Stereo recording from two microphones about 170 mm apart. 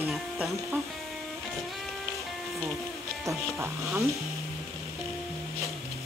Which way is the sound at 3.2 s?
15° right (ahead or behind).